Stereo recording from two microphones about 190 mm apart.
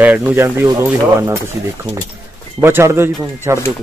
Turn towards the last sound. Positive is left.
turn(degrees=-15)  # may be behind; listen again after turning